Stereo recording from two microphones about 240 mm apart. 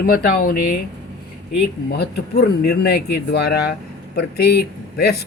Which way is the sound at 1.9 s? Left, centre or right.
Left.